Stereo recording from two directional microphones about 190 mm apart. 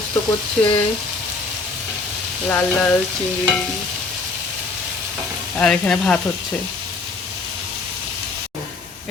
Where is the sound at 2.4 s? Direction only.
10° left (ahead or behind).